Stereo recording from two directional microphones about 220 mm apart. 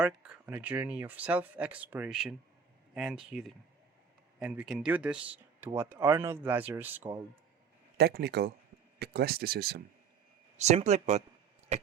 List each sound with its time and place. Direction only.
0.0 s speech: 5° right (ahead or behind)
7.9 s speech: 45° right (ahead or behind)
10.6 s speech: 30° right (ahead or behind)
11.7 s chop: 30° right (ahead or behind)